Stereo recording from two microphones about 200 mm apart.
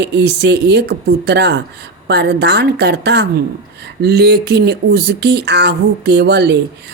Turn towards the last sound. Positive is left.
turn(degrees=-55)  # may be behind; listen again after turning